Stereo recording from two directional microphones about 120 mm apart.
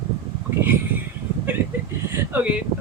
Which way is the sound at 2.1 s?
15° right (ahead or behind).